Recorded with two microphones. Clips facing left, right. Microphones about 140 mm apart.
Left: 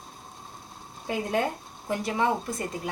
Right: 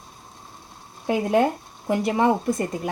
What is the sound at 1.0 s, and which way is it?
Speech, 75° right (ahead or behind).